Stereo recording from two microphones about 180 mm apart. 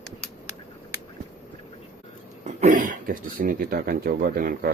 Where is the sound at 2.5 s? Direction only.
45° right (ahead or behind).